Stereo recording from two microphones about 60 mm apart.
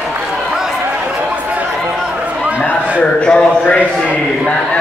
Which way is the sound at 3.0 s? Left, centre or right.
Centre.